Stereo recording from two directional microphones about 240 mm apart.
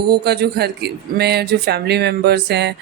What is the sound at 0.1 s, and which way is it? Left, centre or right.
Speech, right.